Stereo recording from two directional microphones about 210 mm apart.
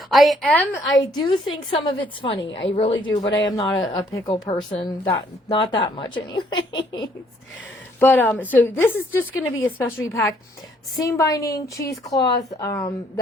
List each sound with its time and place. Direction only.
0.1 s a woman's voice: centre (ahead or behind)
1.1 s a woman's voice: 20° left (ahead or behind)
7.9 s a woman's voice: 10° left (ahead or behind)